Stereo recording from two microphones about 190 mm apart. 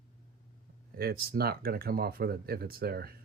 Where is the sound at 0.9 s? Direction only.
55° right (ahead or behind).